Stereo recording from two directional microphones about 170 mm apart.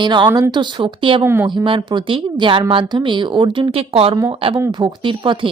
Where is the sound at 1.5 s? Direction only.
30° right (ahead or behind).